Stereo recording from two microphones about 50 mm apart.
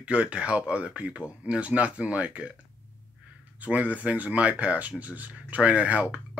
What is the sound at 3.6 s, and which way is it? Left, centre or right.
Speech, right.